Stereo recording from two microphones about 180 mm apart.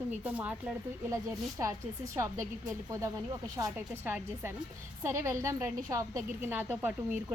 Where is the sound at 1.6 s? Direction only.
15° right (ahead or behind).